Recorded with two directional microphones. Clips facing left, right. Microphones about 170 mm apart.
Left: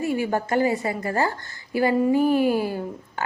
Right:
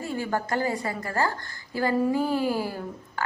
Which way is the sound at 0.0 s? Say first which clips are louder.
Left 5 dB; 15° left (ahead or behind).